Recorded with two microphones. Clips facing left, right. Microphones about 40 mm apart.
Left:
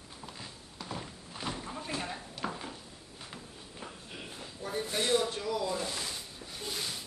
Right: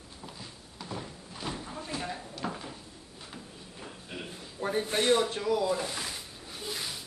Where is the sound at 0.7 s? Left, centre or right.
Centre.